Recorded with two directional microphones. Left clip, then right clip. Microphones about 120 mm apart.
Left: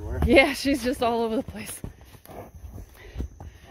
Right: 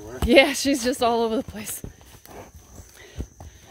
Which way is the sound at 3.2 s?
70° left (ahead or behind).